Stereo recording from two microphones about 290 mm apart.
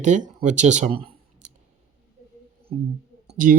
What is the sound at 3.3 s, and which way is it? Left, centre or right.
Speech, right.